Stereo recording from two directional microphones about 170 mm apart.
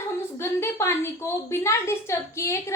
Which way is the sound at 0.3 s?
15° left (ahead or behind).